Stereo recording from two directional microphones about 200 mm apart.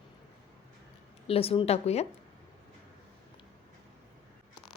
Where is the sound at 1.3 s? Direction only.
30° left (ahead or behind).